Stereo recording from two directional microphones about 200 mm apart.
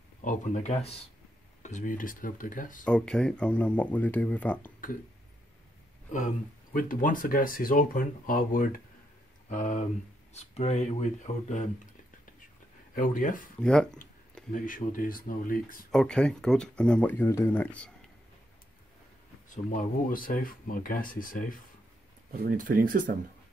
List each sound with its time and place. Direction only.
0.2 s speech: 40° left (ahead or behind)
2.8 s speech: 5° left (ahead or behind)
6.1 s speech: 40° left (ahead or behind)
12.9 s speech: 45° left (ahead or behind)
13.6 s speech: 5° left (ahead or behind)
14.5 s speech: 40° left (ahead or behind)
15.9 s speech: 5° left (ahead or behind)
19.5 s speech: 40° left (ahead or behind)
22.3 s speech: 45° right (ahead or behind)